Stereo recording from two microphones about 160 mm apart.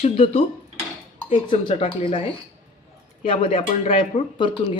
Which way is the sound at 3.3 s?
40° left (ahead or behind).